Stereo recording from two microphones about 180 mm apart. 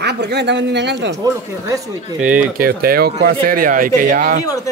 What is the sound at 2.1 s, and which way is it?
Speech, 5° right (ahead or behind).